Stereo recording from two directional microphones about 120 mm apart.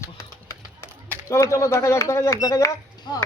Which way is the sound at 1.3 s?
25° left (ahead or behind).